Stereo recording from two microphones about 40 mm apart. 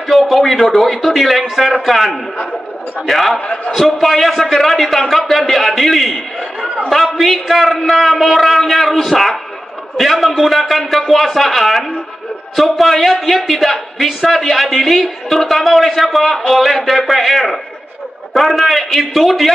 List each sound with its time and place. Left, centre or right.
0.1 s a man's voice: centre
3.3 s a man's voice: centre
3.7 s a man's voice: centre